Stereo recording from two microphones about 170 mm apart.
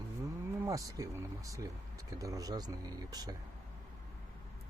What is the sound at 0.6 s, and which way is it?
Speech, 20° right (ahead or behind).